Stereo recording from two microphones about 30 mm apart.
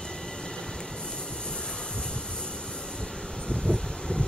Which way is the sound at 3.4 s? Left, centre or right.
Left.